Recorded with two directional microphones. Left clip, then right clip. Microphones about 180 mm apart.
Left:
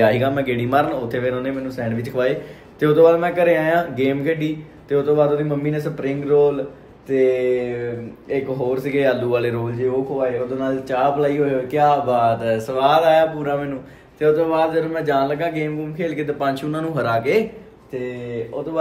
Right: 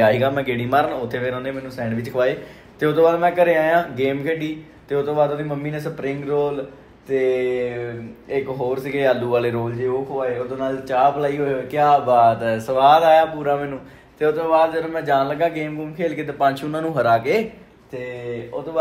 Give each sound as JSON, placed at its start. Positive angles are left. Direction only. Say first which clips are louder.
{"t": 0.0, "sound": "a man's voice", "louder": "even", "side_deg": 0}